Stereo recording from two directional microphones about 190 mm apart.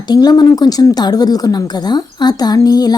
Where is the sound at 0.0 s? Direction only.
20° left (ahead or behind).